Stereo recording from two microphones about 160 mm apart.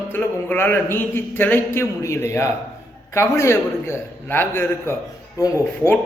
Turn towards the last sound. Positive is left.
turn(degrees=15)  # may be behind; listen again after turning